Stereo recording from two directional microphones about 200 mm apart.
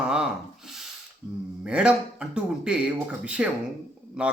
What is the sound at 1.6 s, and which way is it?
Speech, 5° right (ahead or behind).